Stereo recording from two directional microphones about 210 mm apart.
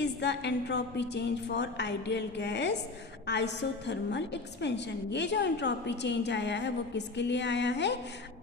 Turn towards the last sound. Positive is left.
turn(degrees=55)  # may be behind; listen again after turning